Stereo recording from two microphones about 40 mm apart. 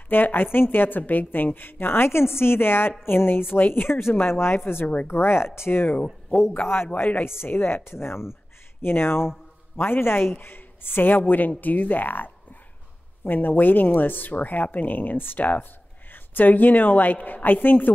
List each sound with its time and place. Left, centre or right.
0.1 s a woman's voice: left
4.3 s speech: left
6.6 s a woman's voice: left
7.2 s speech: left
8.8 s a woman's voice: left
13.3 s speech: left